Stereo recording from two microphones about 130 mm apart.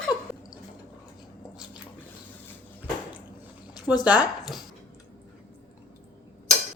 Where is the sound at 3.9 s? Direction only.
10° right (ahead or behind).